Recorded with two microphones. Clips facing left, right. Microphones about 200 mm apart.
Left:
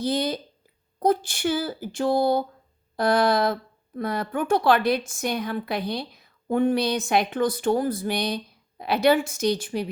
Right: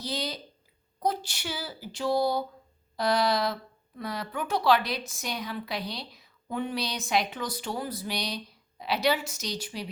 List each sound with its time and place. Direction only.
0.0 s speech: 50° left (ahead or behind)